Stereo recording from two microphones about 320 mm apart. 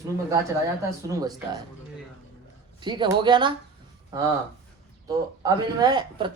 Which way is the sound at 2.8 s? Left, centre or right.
Centre.